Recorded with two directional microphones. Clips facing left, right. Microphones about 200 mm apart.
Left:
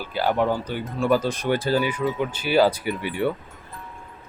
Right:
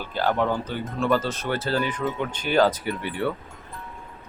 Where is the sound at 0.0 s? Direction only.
10° left (ahead or behind).